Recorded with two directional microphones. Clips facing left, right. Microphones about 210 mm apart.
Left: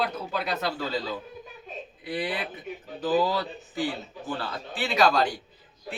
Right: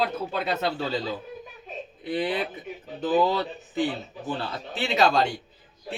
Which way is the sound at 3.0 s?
20° right (ahead or behind).